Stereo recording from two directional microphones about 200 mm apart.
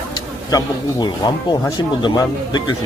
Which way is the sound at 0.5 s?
20° left (ahead or behind).